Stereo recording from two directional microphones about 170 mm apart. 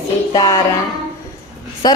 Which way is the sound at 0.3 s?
20° left (ahead or behind).